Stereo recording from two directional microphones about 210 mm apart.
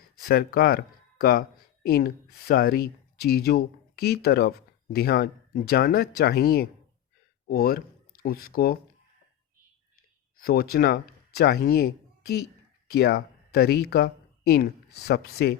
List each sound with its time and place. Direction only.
0.2 s speech: 45° left (ahead or behind)
10.3 s speech: 45° left (ahead or behind)